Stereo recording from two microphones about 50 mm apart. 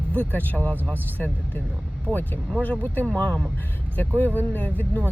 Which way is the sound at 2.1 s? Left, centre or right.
Right.